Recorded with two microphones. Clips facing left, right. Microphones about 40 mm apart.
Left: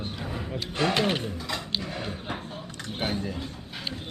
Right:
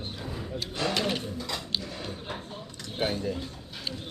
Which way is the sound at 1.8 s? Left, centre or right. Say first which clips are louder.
Left 3 dB; left.